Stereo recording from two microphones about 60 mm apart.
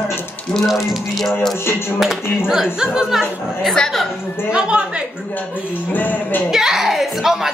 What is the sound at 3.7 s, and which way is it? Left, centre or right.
Speech, centre.